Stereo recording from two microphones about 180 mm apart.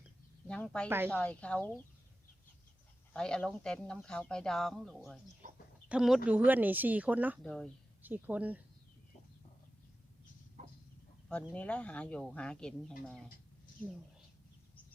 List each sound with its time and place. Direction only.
0.4 s speech: 5° left (ahead or behind)
0.9 s speech: 10° right (ahead or behind)
1.1 s speech: 5° left (ahead or behind)
3.1 s speech: 5° left (ahead or behind)
5.4 s chicken: 45° right (ahead or behind)
5.9 s speech: 5° right (ahead or behind)
7.4 s speech: 5° left (ahead or behind)
8.0 s speech: 10° right (ahead or behind)
11.3 s speech: 5° left (ahead or behind)